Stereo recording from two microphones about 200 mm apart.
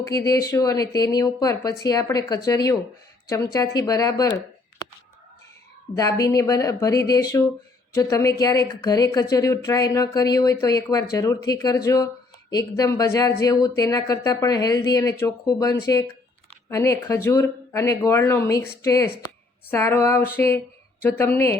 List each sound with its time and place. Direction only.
0.0 s speech: 15° left (ahead or behind)
6.0 s speech: 15° left (ahead or behind)